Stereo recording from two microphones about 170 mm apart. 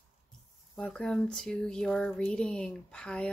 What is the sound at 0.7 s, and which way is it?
Speech, 5° left (ahead or behind).